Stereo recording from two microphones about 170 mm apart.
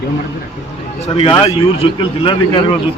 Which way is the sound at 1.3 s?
30° left (ahead or behind).